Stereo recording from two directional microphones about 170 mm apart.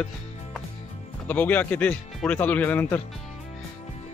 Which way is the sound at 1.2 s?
10° left (ahead or behind).